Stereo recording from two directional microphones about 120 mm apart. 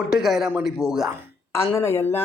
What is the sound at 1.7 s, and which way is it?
Speech, 20° left (ahead or behind).